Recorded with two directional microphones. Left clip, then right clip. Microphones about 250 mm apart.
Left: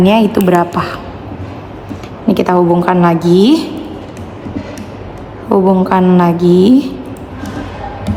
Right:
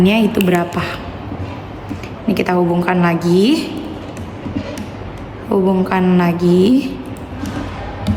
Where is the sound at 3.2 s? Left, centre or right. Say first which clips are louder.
Left 3 dB; left.